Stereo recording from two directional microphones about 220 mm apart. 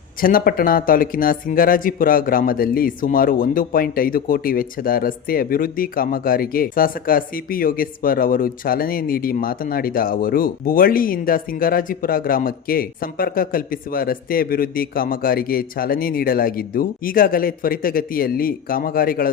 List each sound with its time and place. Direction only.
0.2 s speech: 40° left (ahead or behind)